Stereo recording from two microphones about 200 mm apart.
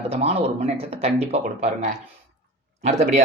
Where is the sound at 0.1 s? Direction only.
30° right (ahead or behind).